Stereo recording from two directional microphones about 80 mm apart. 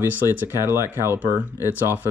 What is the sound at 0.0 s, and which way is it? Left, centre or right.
Speech, right.